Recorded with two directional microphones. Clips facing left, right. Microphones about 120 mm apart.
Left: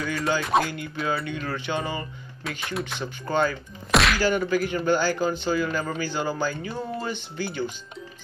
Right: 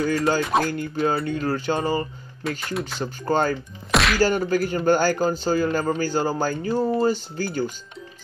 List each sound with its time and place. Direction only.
0.4 s speech: centre (ahead or behind)
0.7 s speech: 40° right (ahead or behind)
2.4 s speech: centre (ahead or behind)
3.0 s speech: 40° right (ahead or behind)
3.9 s whack: centre (ahead or behind)
4.2 s speech: 40° right (ahead or behind)